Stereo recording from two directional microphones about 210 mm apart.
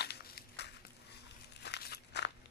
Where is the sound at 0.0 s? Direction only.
50° left (ahead or behind).